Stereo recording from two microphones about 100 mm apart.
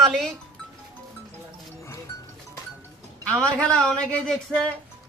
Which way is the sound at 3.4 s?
10° left (ahead or behind).